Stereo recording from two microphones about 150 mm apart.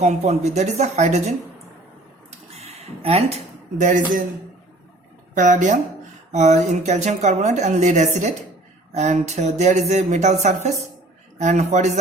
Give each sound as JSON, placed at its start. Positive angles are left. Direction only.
{"t": 0.0, "sound": "speech", "side_deg": -45}
{"t": 2.6, "sound": "speech", "side_deg": -45}
{"t": 5.3, "sound": "speech", "side_deg": -55}